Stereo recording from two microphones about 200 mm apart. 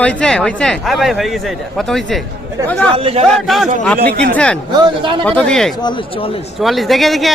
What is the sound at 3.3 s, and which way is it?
Speech, centre (ahead or behind).